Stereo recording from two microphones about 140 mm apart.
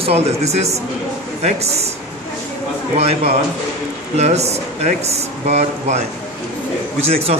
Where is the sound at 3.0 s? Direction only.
50° right (ahead or behind).